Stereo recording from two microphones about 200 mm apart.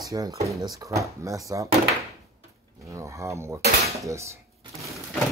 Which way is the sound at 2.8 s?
15° right (ahead or behind).